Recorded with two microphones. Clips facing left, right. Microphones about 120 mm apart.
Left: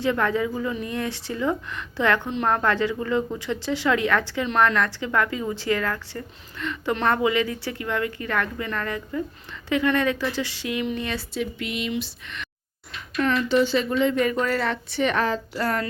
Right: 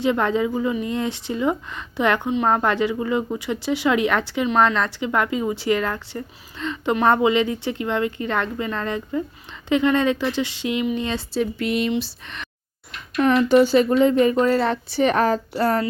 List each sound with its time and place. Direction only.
0.0 s a woman's voice: 20° right (ahead or behind)
2.3 s speech: 5° right (ahead or behind)
2.6 s a woman's voice: 15° right (ahead or behind)
11.3 s a woman's voice: 40° right (ahead or behind)
13.5 s a woman's voice: 45° right (ahead or behind)